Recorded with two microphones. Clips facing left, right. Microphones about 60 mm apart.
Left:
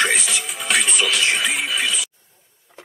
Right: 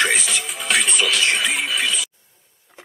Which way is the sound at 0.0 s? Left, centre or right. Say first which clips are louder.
Even; centre.